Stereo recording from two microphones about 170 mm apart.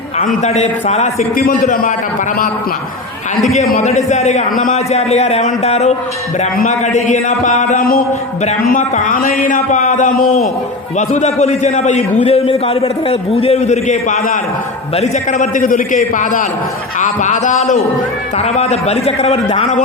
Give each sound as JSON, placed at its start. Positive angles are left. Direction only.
{"t": 0.4, "sound": "a man's voice", "side_deg": 40}
{"t": 1.4, "sound": "a man's voice", "side_deg": 55}
{"t": 3.8, "sound": "a man's voice", "side_deg": 40}
{"t": 10.9, "sound": "a man's voice", "side_deg": 40}